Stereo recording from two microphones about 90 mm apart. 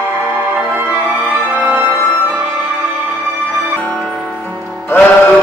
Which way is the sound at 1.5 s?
20° right (ahead or behind).